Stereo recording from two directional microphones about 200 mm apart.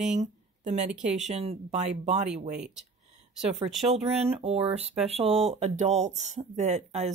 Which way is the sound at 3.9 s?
30° right (ahead or behind).